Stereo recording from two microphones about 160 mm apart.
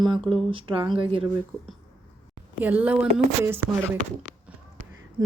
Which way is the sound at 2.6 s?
10° right (ahead or behind).